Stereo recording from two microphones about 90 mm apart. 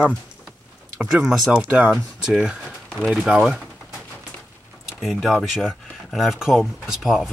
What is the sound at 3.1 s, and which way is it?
Speech, 10° right (ahead or behind).